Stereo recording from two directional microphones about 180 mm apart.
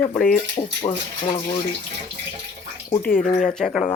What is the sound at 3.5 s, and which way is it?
Speech, centre (ahead or behind).